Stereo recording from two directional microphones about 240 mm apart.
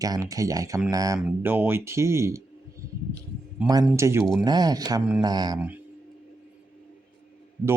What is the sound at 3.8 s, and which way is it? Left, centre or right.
Speech, centre.